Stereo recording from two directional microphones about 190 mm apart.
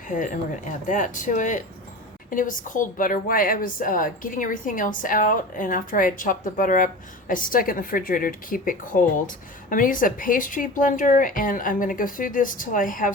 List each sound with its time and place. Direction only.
0.9 s a woman's voice: 40° left (ahead or behind)